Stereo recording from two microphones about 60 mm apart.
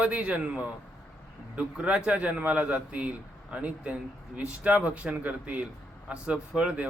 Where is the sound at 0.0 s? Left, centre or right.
Right.